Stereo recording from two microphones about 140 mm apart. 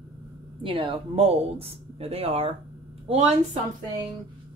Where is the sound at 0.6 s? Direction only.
40° right (ahead or behind).